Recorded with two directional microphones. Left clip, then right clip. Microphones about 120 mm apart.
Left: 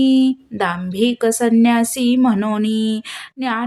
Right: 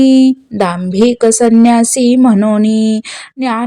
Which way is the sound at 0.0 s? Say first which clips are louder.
Right 7 dB; 50° right (ahead or behind).